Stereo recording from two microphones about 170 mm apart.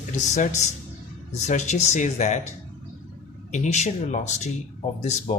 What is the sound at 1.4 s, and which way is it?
Speech, 45° left (ahead or behind).